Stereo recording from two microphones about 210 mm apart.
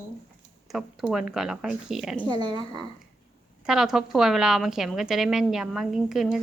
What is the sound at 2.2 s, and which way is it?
Speech, 20° right (ahead or behind).